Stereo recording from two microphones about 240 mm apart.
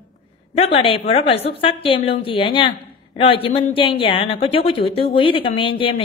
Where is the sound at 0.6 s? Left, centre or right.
Left.